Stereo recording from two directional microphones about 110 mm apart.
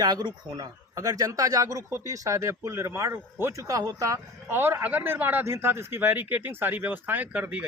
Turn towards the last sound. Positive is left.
turn(degrees=-15)  # may be behind; listen again after turning